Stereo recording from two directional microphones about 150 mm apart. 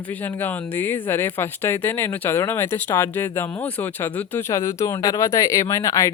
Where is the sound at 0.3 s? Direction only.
15° left (ahead or behind).